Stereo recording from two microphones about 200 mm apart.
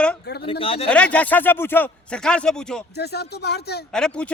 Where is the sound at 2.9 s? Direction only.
55° left (ahead or behind).